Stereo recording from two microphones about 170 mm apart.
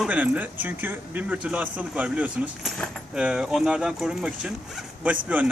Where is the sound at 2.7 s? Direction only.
5° left (ahead or behind).